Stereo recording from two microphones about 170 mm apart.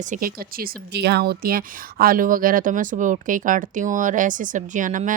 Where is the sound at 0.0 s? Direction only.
50° right (ahead or behind).